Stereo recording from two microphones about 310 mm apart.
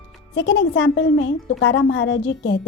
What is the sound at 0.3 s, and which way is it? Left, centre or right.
A woman's voice, left.